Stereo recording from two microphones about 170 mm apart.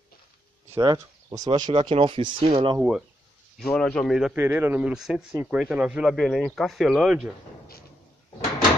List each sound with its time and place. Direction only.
0.7 s speech: 20° right (ahead or behind)
3.5 s speech: 5° left (ahead or behind)
4.4 s speech: 10° right (ahead or behind)